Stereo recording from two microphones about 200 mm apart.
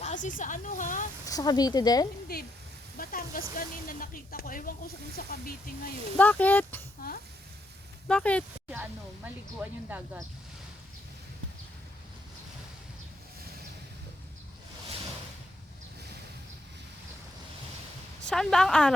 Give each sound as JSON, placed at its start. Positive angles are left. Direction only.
{"t": 0.0, "sound": "speech", "side_deg": 40}
{"t": 1.2, "sound": "speech", "side_deg": 20}
{"t": 2.3, "sound": "speech", "side_deg": 50}
{"t": 6.1, "sound": "speech", "side_deg": 10}
{"t": 8.0, "sound": "speech", "side_deg": 5}
{"t": 9.2, "sound": "speech", "side_deg": -10}
{"t": 18.3, "sound": "a woman's voice", "side_deg": 5}